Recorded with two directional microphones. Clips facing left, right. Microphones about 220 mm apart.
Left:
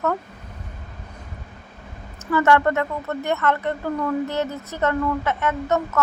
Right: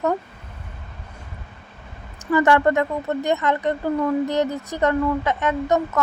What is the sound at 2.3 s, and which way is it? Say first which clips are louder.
A woman's voice: right 1 dB; 15° right (ahead or behind).